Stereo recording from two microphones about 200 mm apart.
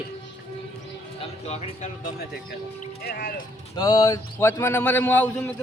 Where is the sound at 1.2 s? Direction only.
30° left (ahead or behind).